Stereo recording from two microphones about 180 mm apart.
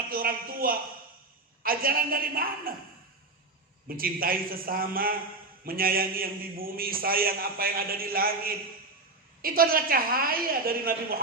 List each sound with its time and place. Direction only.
0.1 s a man's voice: 55° right (ahead or behind)
3.8 s a man's voice: 55° right (ahead or behind)